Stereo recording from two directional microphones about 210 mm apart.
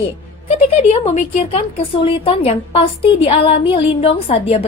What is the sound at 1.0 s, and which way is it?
A woman's voice, 30° left (ahead or behind).